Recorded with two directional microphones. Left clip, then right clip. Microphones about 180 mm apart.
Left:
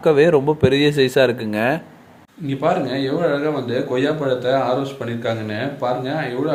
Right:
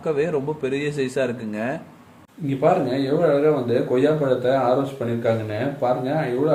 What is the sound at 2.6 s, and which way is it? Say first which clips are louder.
Speech: even; 5° right (ahead or behind).